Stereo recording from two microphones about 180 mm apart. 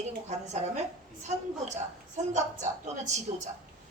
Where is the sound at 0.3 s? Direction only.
40° right (ahead or behind).